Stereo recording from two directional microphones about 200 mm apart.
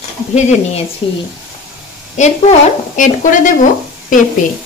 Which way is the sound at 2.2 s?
35° left (ahead or behind).